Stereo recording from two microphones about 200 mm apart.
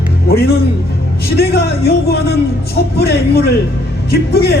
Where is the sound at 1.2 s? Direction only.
50° left (ahead or behind).